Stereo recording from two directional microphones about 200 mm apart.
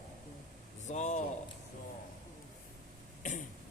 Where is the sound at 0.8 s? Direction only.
35° left (ahead or behind).